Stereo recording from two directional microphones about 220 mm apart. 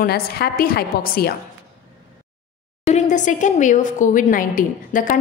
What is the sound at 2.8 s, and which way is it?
A woman's voice, 30° left (ahead or behind).